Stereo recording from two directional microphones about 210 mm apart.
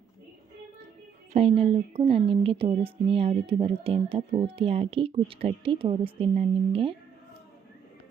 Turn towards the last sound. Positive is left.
turn(degrees=-25)  # may be behind; listen again after turning